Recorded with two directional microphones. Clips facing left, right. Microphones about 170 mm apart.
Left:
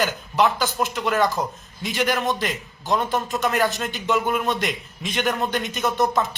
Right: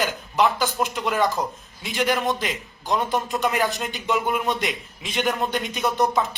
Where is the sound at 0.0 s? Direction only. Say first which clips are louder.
Left 1 dB; centre (ahead or behind).